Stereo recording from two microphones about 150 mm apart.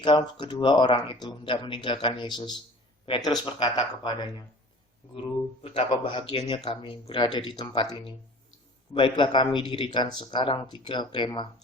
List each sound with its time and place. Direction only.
0.0 s speech: 30° left (ahead or behind)
5.9 s speech: 35° left (ahead or behind)